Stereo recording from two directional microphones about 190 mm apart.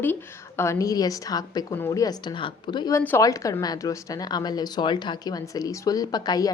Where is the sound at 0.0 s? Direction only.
10° left (ahead or behind).